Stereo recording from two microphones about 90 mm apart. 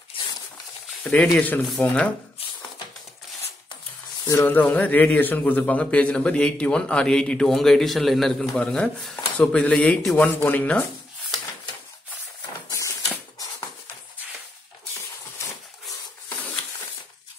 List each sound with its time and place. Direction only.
1.1 s a man's voice: 15° left (ahead or behind)
4.3 s a man's voice: 20° left (ahead or behind)
12.6 s a sound: 35° left (ahead or behind)